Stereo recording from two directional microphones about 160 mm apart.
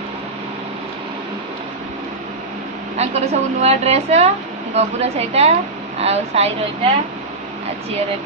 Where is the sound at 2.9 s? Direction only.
40° right (ahead or behind).